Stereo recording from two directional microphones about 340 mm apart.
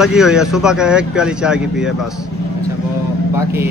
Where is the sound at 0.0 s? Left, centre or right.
Centre.